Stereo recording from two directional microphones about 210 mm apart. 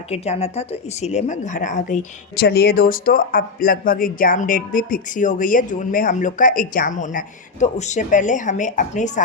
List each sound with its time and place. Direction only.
0.1 s speech: 30° left (ahead or behind)